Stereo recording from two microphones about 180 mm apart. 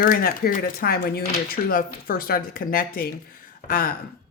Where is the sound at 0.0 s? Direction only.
50° left (ahead or behind).